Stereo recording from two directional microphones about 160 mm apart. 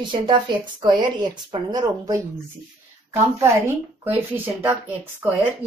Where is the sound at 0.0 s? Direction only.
30° right (ahead or behind).